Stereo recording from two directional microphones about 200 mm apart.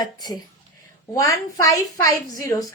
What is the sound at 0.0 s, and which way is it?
A woman's voice, 20° left (ahead or behind).